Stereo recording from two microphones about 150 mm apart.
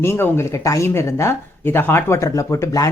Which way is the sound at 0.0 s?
15° left (ahead or behind).